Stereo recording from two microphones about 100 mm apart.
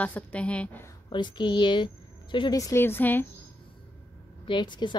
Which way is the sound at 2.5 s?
30° left (ahead or behind).